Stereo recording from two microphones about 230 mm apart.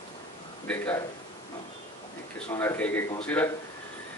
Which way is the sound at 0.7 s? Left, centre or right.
Centre.